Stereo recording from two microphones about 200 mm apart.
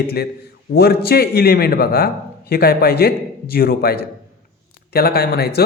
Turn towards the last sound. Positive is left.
turn(degrees=50)  # may be behind; listen again after turning